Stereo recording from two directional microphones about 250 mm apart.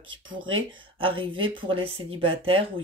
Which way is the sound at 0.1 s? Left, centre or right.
Centre.